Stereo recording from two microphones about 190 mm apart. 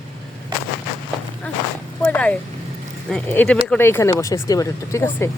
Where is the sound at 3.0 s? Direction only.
5° left (ahead or behind).